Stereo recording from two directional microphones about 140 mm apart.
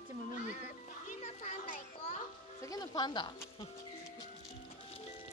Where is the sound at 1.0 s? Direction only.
60° left (ahead or behind).